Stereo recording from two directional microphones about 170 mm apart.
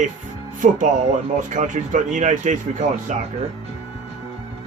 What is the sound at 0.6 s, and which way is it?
Speech, 50° right (ahead or behind).